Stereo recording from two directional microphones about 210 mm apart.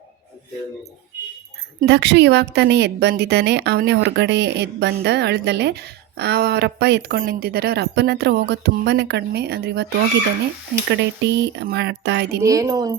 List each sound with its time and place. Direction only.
1.8 s a woman's voice: 55° right (ahead or behind)
10.8 s a woman's voice: 55° right (ahead or behind)
12.4 s speech: 15° right (ahead or behind)